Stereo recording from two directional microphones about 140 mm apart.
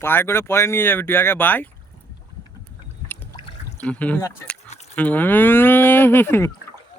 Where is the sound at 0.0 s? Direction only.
15° left (ahead or behind).